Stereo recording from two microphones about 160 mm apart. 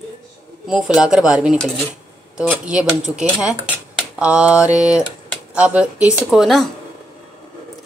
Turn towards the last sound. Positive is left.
turn(degrees=0)  # may be behind; listen again after turning